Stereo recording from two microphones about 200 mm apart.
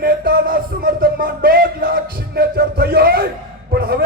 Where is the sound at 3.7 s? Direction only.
50° right (ahead or behind).